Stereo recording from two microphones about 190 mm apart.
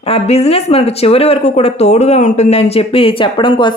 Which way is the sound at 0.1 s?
35° left (ahead or behind).